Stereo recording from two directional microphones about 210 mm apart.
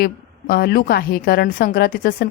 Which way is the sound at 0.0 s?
45° left (ahead or behind).